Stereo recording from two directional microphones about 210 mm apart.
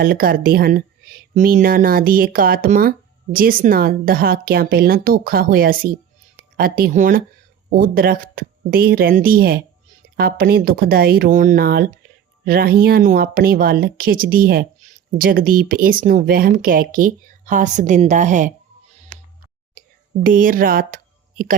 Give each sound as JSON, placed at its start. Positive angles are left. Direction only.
{"t": 0.0, "sound": "speech", "side_deg": -45}
{"t": 20.2, "sound": "speech", "side_deg": -40}